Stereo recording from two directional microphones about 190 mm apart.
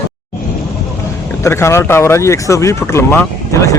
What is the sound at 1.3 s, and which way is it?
Speech, 15° left (ahead or behind).